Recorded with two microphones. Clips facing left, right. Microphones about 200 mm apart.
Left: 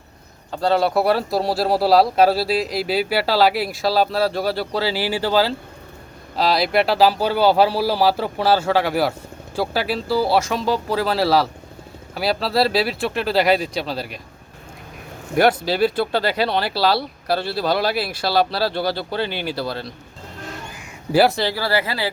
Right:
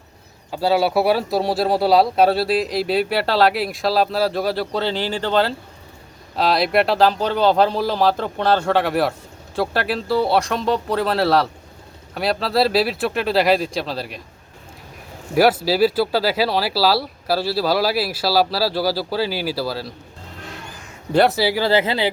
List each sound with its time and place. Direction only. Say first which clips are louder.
0.5 s speech: right 1 dB; 5° right (ahead or behind)
15.4 s speech: right 2 dB; 5° right (ahead or behind)
21.1 s speech: even; 5° left (ahead or behind)
21.3 s speech: right 4 dB; 10° right (ahead or behind)